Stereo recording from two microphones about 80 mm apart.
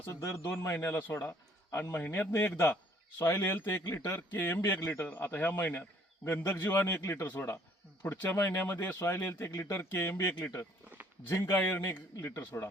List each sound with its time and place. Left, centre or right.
0.1 s a man's voice: left